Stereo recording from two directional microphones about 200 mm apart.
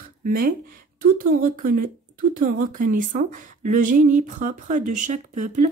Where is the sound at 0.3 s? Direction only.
45° right (ahead or behind).